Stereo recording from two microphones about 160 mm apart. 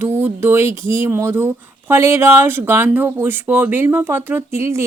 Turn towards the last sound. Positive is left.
turn(degrees=-15)  # may be behind; listen again after turning